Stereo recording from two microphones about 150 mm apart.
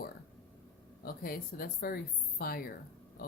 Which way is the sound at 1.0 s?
80° left.